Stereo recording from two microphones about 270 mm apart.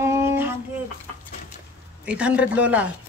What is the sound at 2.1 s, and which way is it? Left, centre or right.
Speech, centre.